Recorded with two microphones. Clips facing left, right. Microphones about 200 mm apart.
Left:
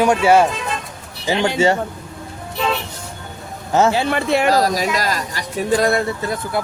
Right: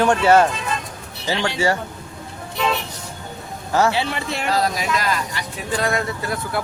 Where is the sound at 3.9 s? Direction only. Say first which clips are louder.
Left 6 dB; 50° left (ahead or behind).